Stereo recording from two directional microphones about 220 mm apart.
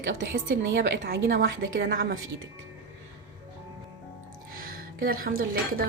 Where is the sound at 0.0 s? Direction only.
45° right (ahead or behind).